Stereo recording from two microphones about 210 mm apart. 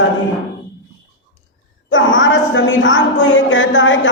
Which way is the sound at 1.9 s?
65° left (ahead or behind).